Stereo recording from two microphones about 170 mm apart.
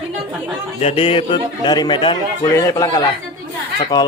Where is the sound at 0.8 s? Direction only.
35° left (ahead or behind).